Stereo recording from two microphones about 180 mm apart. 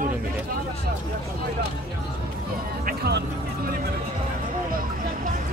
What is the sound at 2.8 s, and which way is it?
Music, 65° right (ahead or behind).